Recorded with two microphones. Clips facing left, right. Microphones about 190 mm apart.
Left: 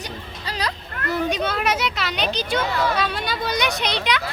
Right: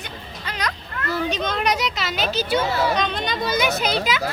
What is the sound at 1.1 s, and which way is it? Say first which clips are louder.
A child's voice: left 1 dB; 10° left (ahead or behind).